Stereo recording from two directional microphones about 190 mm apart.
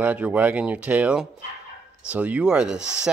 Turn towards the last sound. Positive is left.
turn(degrees=15)  # may be behind; listen again after turning